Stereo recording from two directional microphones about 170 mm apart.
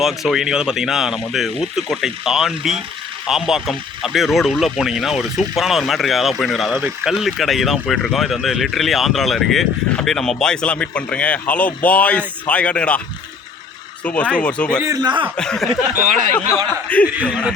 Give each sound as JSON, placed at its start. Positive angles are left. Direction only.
{"t": 0.0, "sound": "speech", "side_deg": 0}
{"t": 14.0, "sound": "speech", "side_deg": 10}
{"t": 14.8, "sound": "a man's voice", "side_deg": -20}
{"t": 15.4, "sound": "speech", "side_deg": 5}
{"t": 16.0, "sound": "speech", "side_deg": -50}
{"t": 16.9, "sound": "speech", "side_deg": 10}